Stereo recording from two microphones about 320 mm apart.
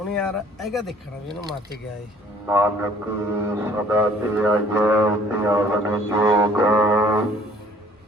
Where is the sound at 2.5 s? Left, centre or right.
Centre.